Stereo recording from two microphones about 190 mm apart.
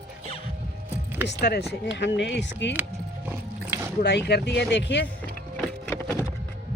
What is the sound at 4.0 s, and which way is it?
Speech, 60° left (ahead or behind).